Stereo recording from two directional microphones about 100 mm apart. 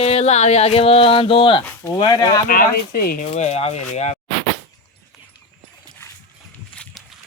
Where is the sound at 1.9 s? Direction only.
45° left (ahead or behind).